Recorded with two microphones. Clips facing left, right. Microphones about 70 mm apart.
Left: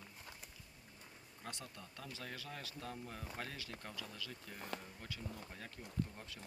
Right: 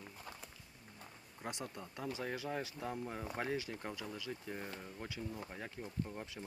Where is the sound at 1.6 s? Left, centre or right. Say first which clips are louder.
Right 8 dB; right.